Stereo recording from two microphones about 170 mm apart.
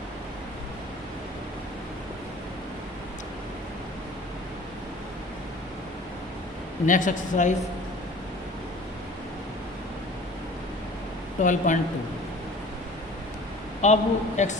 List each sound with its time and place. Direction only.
6.8 s speech: 50° left (ahead or behind)
11.3 s speech: 50° left (ahead or behind)
13.8 s speech: 45° left (ahead or behind)